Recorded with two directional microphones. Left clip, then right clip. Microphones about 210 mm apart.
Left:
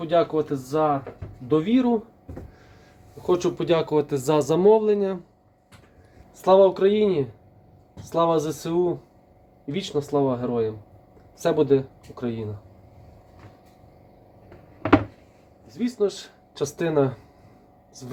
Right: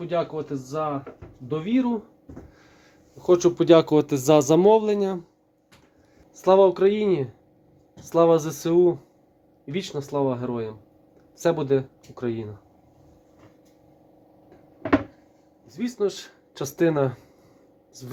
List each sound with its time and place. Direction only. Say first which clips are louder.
0.1 s speech: left 6 dB; 20° right (ahead or behind)
3.2 s speech: right 5 dB; 40° right (ahead or behind)
6.4 s speech: left 1 dB; 30° right (ahead or behind)
15.6 s speech: left 2 dB; 35° right (ahead or behind)